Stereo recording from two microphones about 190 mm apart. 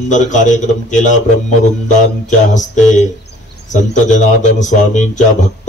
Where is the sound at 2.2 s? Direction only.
40° left (ahead or behind).